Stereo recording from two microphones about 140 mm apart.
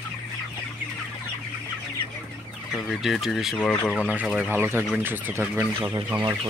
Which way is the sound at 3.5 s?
10° left (ahead or behind).